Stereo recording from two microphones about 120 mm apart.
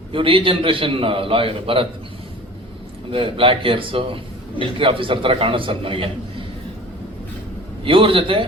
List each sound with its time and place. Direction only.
0.1 s a man's voice: 45° right (ahead or behind)
3.1 s a man's voice: 45° right (ahead or behind)
7.9 s a man's voice: 45° right (ahead or behind)